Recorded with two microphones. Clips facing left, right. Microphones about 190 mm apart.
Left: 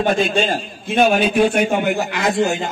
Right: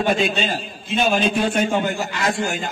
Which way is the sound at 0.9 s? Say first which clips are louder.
Left 5 dB; 60° left (ahead or behind).